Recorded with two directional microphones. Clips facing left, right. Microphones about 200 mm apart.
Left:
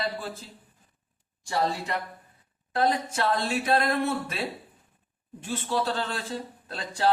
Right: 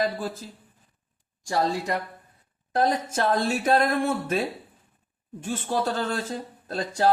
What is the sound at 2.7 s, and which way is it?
Speech, 45° right (ahead or behind).